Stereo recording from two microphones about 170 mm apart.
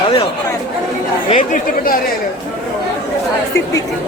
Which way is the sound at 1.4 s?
55° left (ahead or behind).